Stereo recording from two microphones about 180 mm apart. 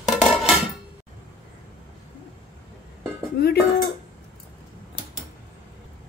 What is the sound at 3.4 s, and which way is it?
Speech, 60° left (ahead or behind).